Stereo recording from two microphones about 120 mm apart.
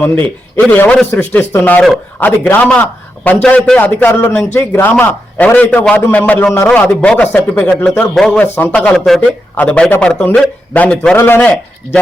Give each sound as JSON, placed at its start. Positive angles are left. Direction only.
{"t": 0.0, "sound": "a man's voice", "side_deg": 15}
{"t": 8.1, "sound": "a man's voice", "side_deg": 5}